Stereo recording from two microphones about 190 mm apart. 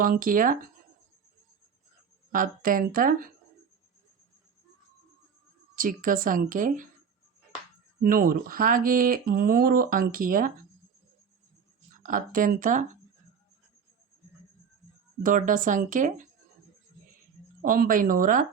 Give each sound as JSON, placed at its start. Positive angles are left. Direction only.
{"t": 0.0, "sound": "speech", "side_deg": -45}
{"t": 2.3, "sound": "speech", "side_deg": -45}
{"t": 5.7, "sound": "speech", "side_deg": -45}
{"t": 8.0, "sound": "speech", "side_deg": -50}
{"t": 11.9, "sound": "speech", "side_deg": -45}
{"t": 15.2, "sound": "speech", "side_deg": -45}
{"t": 17.6, "sound": "speech", "side_deg": -45}